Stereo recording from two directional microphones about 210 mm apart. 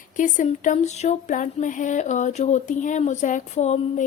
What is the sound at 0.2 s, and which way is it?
Speech, 35° left (ahead or behind).